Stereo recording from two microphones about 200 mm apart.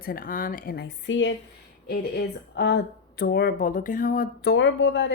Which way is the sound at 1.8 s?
50° left (ahead or behind).